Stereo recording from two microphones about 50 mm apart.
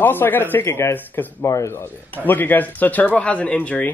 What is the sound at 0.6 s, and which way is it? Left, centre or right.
Speech, left.